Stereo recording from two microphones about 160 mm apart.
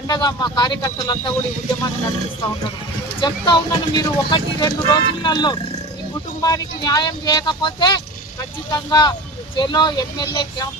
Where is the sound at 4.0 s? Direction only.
25° left (ahead or behind).